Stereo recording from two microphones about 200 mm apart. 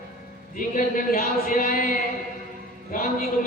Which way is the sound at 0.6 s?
45° left (ahead or behind).